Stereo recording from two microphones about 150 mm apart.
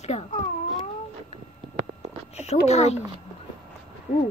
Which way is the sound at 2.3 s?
45° left (ahead or behind).